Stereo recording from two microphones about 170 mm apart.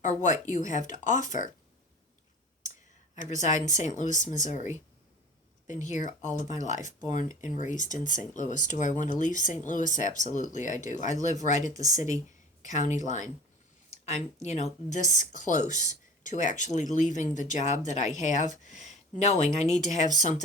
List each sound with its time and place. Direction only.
0.0 s speech: 45° left (ahead or behind)
3.2 s speech: 45° left (ahead or behind)
5.6 s speech: 45° left (ahead or behind)
11.7 s speech: 20° right (ahead or behind)
11.9 s speech: 45° left (ahead or behind)